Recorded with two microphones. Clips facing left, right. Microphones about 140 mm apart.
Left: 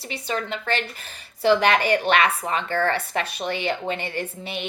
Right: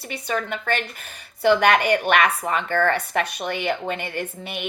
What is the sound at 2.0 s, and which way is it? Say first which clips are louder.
Speech: right 1 dB; 55° right (ahead or behind).